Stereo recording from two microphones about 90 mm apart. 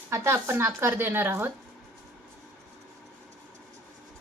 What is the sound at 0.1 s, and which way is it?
Speech, 25° right (ahead or behind).